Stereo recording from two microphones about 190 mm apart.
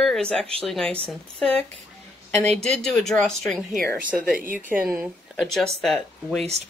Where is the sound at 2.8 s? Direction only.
Centre (ahead or behind).